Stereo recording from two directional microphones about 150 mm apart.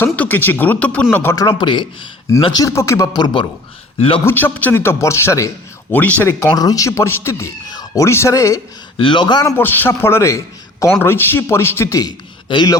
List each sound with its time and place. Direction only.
0.0 s a man's voice: 15° left (ahead or behind); by 1.9 s 30° left (ahead or behind)
2.6 s speech: 20° left (ahead or behind)
4.3 s a man's voice: 10° left (ahead or behind)
9.0 s a man's voice: 30° left (ahead or behind)